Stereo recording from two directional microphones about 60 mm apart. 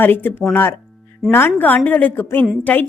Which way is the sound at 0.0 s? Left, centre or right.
Left.